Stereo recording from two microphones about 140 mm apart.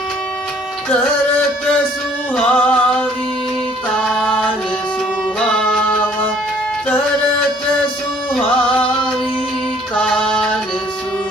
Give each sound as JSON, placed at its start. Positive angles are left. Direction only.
{"t": 2.3, "sound": "music", "side_deg": 5}
{"t": 9.9, "sound": "music", "side_deg": 5}